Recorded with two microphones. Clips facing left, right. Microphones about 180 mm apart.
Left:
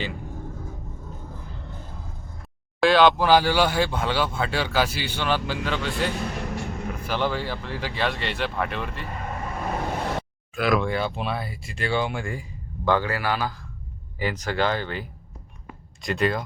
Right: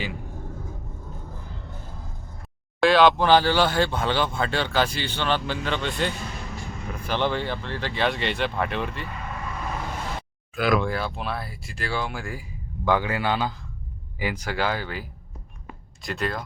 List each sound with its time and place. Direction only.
2.8 s speech: centre (ahead or behind)
6.1 s music: 60° left (ahead or behind)
7.1 s speech: 5° left (ahead or behind)
9.0 s vehicle: 45° left (ahead or behind)
10.5 s speech: centre (ahead or behind)
16.0 s speech: centre (ahead or behind)